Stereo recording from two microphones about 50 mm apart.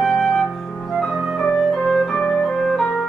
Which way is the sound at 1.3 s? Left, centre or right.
Centre.